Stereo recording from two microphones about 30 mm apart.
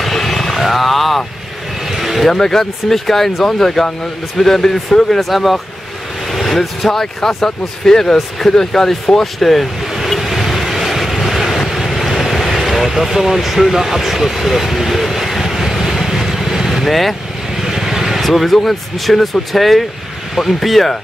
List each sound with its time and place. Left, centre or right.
0.0 s vehicle: centre
1.9 s a sound: centre
2.3 s speech: centre
5.3 s speech: centre
6.3 s vehicle: centre
6.9 s speech: centre
9.2 s speech: centre
10.2 s vehicle: centre
17.6 s vehicle: centre
18.6 s speech: centre